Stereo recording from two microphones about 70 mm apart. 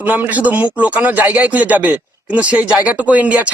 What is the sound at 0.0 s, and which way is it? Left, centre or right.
A man's voice, right.